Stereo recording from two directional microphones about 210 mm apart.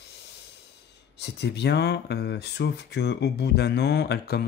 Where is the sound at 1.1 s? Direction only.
55° left (ahead or behind).